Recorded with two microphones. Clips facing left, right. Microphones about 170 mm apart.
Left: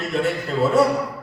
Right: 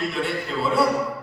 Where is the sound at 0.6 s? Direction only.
45° left (ahead or behind).